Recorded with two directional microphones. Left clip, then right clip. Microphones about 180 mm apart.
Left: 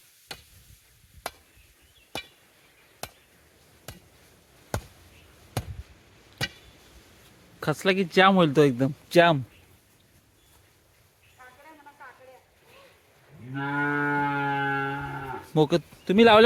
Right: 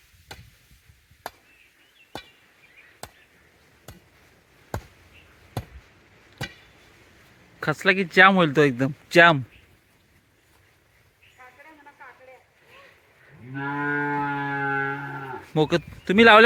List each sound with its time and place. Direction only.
7.6 s speech: 10° left (ahead or behind)
13.5 s moo: 15° left (ahead or behind)
14.3 s livestock: 15° left (ahead or behind)
16.0 s speech: 5° left (ahead or behind)